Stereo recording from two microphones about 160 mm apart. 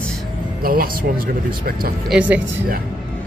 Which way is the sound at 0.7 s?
65° right (ahead or behind).